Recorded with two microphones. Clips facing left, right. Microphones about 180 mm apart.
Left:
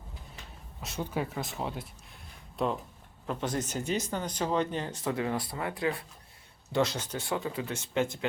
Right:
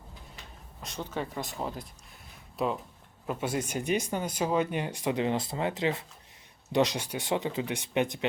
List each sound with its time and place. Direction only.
0.8 s speech: 5° left (ahead or behind); by 8.3 s 15° right (ahead or behind)